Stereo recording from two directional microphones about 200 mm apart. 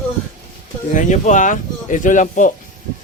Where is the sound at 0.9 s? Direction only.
40° left (ahead or behind).